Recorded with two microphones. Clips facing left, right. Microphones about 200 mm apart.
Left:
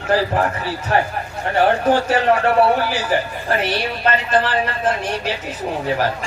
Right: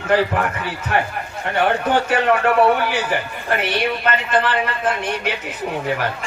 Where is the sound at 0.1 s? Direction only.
35° left (ahead or behind).